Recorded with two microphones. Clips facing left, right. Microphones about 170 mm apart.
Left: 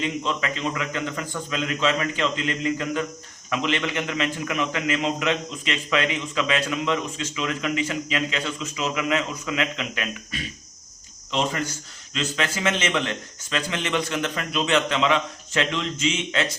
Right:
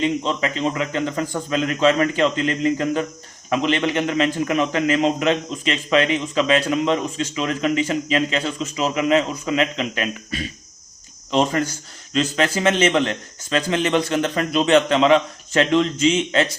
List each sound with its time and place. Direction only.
0.0 s a man's voice: 30° right (ahead or behind)
11.3 s a man's voice: 40° right (ahead or behind)